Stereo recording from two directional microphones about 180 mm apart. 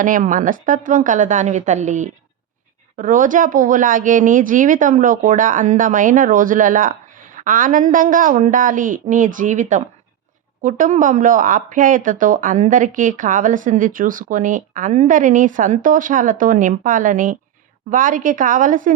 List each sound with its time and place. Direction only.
0.0 s speech: 50° right (ahead or behind)